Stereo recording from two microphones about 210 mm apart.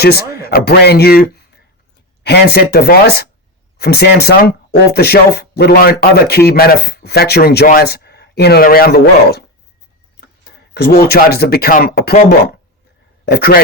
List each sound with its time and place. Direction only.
0.0 s speech: 50° left (ahead or behind)
10.8 s speech: 50° left (ahead or behind)
13.2 s speech: 50° left (ahead or behind)